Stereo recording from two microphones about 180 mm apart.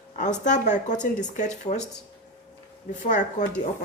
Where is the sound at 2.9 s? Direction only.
45° left (ahead or behind).